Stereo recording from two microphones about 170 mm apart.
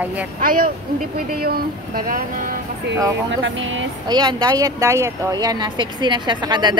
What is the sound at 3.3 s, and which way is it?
Speech, 90° right.